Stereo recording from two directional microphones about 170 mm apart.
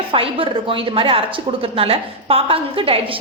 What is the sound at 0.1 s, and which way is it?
A woman's voice, 30° right (ahead or behind).